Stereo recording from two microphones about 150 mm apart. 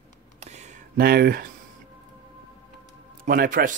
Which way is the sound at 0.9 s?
90° right.